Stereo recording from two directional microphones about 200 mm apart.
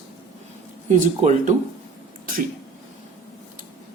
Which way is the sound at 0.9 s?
35° right (ahead or behind).